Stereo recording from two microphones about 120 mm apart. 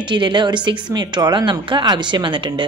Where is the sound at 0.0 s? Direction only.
40° right (ahead or behind).